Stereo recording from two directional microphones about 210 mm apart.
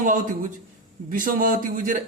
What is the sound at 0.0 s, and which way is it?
Speech, 40° right (ahead or behind).